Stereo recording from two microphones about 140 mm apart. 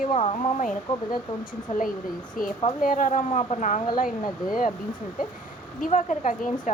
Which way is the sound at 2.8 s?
70° left (ahead or behind).